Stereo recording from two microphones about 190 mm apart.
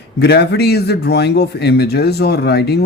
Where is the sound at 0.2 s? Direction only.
60° left (ahead or behind).